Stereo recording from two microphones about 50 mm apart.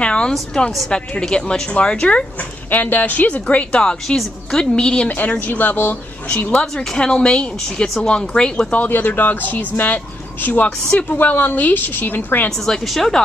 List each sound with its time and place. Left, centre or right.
0.0 s a sound: left
0.8 s speech: centre
2.7 s speech: left
5.5 s speech: left
6.6 s speech: centre
8.7 s a woman's voice: left
12.4 s speech: centre